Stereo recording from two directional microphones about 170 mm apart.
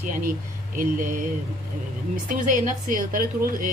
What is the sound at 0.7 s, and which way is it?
Speech, 55° right (ahead or behind).